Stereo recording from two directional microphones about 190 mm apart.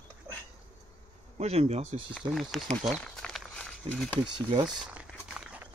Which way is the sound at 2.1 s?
Centre (ahead or behind).